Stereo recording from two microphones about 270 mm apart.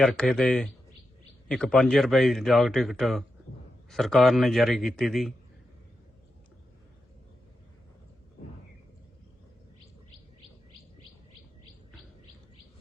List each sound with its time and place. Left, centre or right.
0.0 s speech: centre